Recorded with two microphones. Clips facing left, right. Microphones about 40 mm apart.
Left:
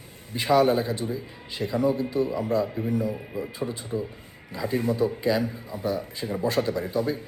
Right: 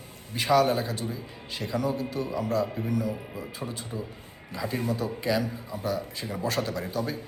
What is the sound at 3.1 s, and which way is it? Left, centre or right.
Speech, centre.